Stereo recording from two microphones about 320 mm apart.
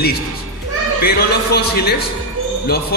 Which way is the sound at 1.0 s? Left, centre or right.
Left.